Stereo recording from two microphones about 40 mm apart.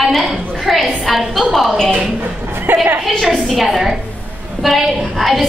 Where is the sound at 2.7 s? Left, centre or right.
Right.